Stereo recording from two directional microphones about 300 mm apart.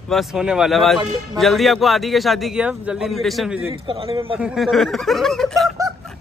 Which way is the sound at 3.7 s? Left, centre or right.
Centre.